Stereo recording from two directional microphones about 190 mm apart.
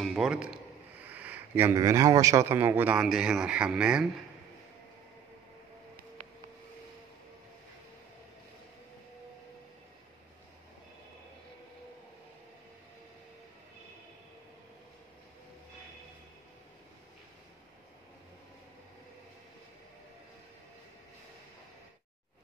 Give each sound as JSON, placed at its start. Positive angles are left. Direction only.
{"t": 0.0, "sound": "speech", "side_deg": 0}